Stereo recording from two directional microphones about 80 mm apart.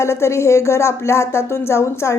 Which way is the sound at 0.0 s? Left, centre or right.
Left.